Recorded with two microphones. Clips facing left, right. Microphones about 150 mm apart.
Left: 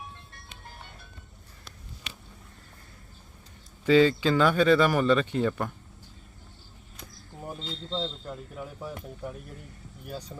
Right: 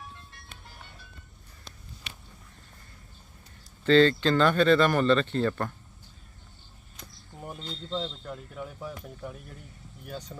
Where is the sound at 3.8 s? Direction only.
10° left (ahead or behind).